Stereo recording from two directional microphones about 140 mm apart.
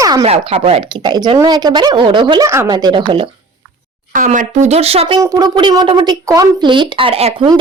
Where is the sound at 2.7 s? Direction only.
35° right (ahead or behind).